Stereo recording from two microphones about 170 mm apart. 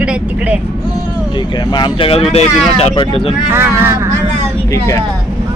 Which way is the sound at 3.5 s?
15° right (ahead or behind).